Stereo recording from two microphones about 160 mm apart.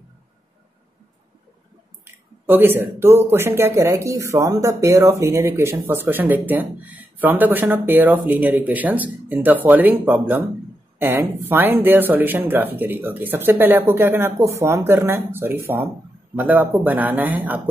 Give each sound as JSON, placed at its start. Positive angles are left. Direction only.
{"t": 2.4, "sound": "speech", "side_deg": -10}